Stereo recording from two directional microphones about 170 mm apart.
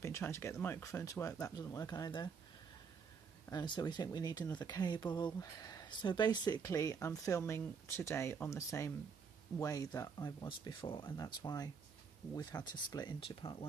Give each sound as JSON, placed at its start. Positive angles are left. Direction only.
{"t": 0.0, "sound": "speech", "side_deg": 15}
{"t": 3.4, "sound": "speech", "side_deg": 25}